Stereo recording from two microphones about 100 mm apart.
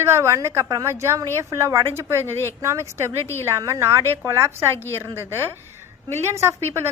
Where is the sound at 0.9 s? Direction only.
25° right (ahead or behind).